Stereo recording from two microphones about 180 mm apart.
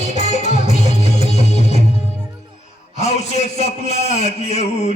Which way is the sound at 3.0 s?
40° left (ahead or behind).